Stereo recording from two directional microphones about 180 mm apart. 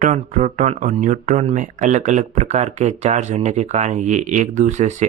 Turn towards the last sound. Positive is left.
turn(degrees=-40)  # may be behind; listen again after turning